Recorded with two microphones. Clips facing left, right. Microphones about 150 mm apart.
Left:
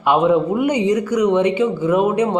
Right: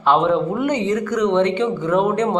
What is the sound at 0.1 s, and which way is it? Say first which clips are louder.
Speech: left 2 dB; 10° left (ahead or behind).